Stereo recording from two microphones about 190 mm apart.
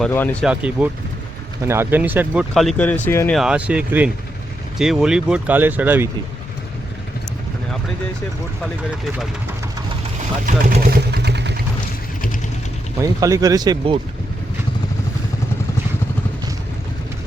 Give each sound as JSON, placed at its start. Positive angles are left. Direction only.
{"t": 0.0, "sound": "speech", "side_deg": 10}
{"t": 0.4, "sound": "speech", "side_deg": -5}
{"t": 3.3, "sound": "speech", "side_deg": -5}
{"t": 10.4, "sound": "vehicle", "side_deg": -50}
{"t": 13.0, "sound": "speech", "side_deg": -15}